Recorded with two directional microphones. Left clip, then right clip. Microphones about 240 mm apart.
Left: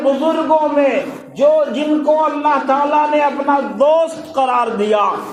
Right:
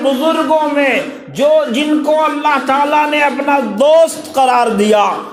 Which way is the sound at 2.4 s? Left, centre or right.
Right.